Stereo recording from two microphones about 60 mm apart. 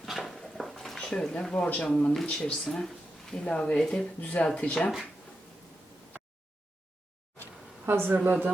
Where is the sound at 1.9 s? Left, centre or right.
Centre.